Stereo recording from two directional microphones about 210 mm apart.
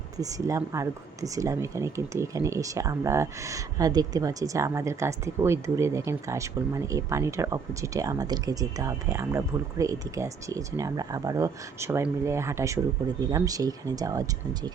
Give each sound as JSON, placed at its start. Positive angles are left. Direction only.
{"t": 0.2, "sound": "speech", "side_deg": -15}